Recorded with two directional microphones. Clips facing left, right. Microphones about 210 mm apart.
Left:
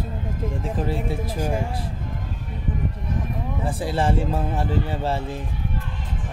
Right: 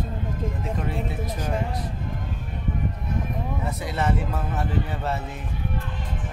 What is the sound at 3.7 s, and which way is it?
Speech, 30° left (ahead or behind).